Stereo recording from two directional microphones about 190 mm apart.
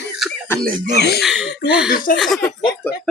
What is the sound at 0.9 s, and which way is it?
Speech, 60° left (ahead or behind).